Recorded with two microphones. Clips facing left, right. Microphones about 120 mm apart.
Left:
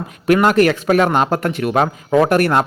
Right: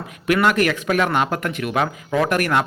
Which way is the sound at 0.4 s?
35° left (ahead or behind).